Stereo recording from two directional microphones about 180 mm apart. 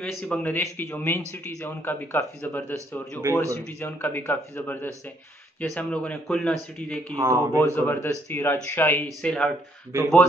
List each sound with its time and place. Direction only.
0.0 s speech: 10° left (ahead or behind)
7.2 s speech: 20° right (ahead or behind)
7.6 s speech: 10° left (ahead or behind)